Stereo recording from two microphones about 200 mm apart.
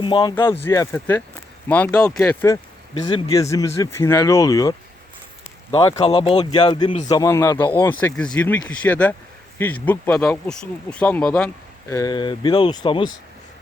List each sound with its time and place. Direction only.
0.0 s speech: 20° left (ahead or behind)
5.7 s speech: 20° left (ahead or behind)
7.1 s speech: 15° left (ahead or behind)
11.9 s speech: 20° left (ahead or behind)